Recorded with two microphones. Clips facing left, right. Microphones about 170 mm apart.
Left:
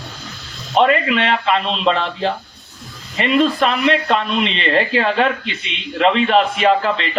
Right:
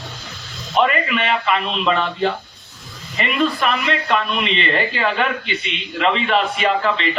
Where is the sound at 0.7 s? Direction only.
35° left (ahead or behind).